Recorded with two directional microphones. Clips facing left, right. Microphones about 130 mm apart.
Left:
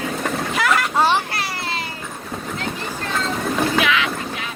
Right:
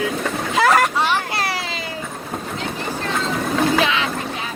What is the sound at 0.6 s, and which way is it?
Vehicle, 40° right (ahead or behind).